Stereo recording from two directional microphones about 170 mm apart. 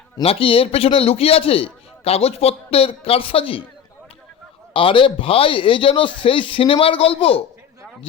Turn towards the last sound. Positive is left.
turn(degrees=35)  # may be behind; listen again after turning